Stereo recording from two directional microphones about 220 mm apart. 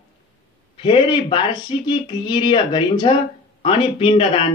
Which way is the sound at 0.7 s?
20° left (ahead or behind).